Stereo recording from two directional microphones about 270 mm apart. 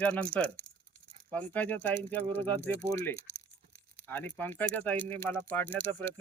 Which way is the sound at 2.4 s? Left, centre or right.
Right.